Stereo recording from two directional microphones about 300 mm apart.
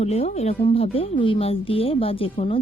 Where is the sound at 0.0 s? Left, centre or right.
Left.